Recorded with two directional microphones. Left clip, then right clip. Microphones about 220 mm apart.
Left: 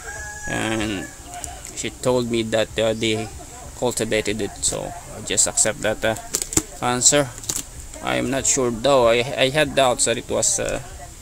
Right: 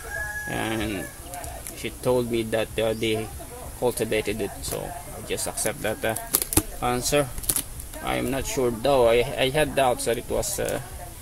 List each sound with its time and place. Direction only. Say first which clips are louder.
0.5 s speech: left 7 dB; 25° left (ahead or behind)